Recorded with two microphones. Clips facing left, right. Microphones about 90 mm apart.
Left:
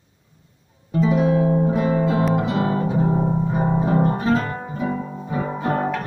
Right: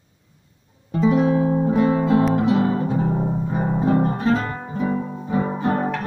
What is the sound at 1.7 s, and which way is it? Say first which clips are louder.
Music: right 2 dB; centre (ahead or behind).